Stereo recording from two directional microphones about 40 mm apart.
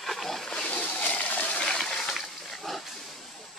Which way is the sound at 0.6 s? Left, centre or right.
Left.